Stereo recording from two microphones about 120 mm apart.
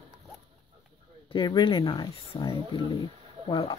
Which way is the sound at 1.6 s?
40° left (ahead or behind).